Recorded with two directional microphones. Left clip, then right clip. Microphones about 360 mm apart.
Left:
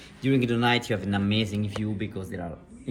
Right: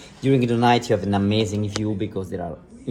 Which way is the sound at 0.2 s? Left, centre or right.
Centre.